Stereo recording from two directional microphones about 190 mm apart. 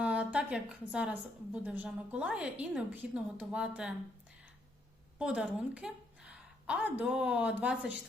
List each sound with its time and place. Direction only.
0.0 s a woman's voice: 5° right (ahead or behind)
5.2 s a woman's voice: 5° right (ahead or behind)